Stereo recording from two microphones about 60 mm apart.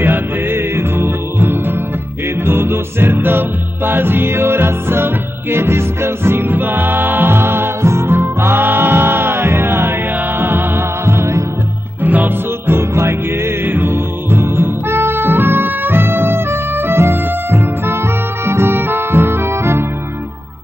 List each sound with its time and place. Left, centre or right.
0.0 s music: right
12.0 s music: right